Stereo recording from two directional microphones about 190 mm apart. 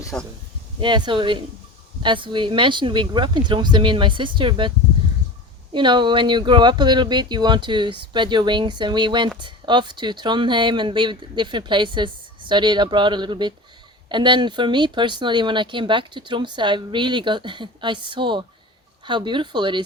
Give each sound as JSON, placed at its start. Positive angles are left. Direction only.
{"t": 0.1, "sound": "speech", "side_deg": 15}
{"t": 0.8, "sound": "speech", "side_deg": -25}
{"t": 5.7, "sound": "speech", "side_deg": -25}